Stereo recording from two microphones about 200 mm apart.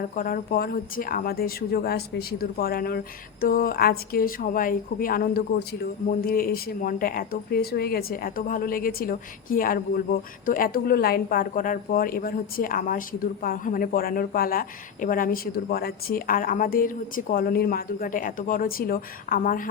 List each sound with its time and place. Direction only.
0.2 s speech: 45° left (ahead or behind)